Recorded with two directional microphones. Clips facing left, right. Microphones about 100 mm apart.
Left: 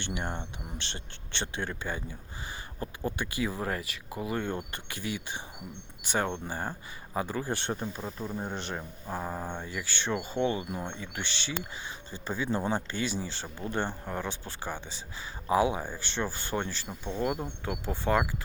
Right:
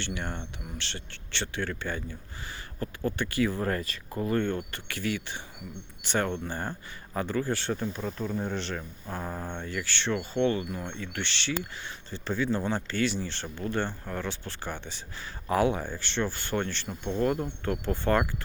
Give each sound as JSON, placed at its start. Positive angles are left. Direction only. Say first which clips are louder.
{"t": 0.0, "sound": "speech", "louder": "even", "side_deg": 15}